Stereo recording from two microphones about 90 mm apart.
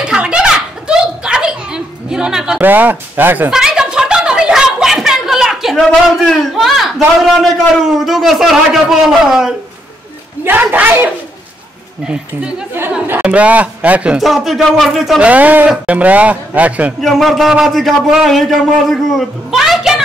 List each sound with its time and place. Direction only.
0.0 s a sound: 10° right (ahead or behind)
2.6 s speech: 20° right (ahead or behind)
3.4 s a sound: 5° right (ahead or behind)
7.8 s a man's voice: 5° right (ahead or behind)
10.4 s speech: 20° right (ahead or behind)
14.1 s a man's voice: centre (ahead or behind)
15.1 s speech: 15° right (ahead or behind)
17.0 s a man's voice: centre (ahead or behind)